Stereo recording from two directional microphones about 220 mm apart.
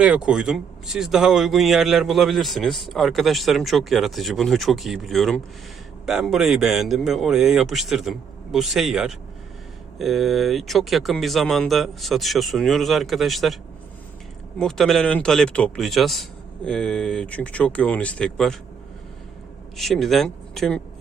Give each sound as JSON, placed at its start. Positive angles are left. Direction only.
{"t": 0.0, "sound": "speech", "side_deg": -5}
{"t": 14.6, "sound": "speech", "side_deg": 0}
{"t": 19.7, "sound": "speech", "side_deg": 0}